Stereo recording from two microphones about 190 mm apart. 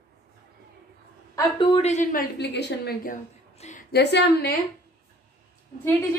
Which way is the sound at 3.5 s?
35° left (ahead or behind).